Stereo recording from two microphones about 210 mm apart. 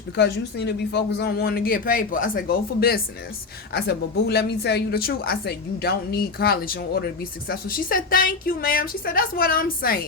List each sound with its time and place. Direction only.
0.2 s a woman's voice: 55° left (ahead or behind)